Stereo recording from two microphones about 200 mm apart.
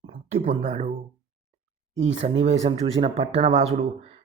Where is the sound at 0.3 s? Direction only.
35° right (ahead or behind).